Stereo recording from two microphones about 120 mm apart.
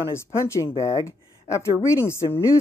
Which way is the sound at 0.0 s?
20° left (ahead or behind).